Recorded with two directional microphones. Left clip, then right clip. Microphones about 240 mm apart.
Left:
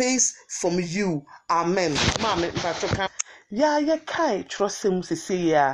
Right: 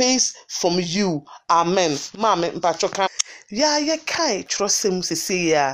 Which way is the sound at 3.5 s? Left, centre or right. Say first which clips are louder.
Right 1 dB; centre.